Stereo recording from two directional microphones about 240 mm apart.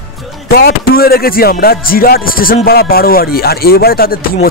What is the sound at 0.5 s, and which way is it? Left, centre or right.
Speech, left.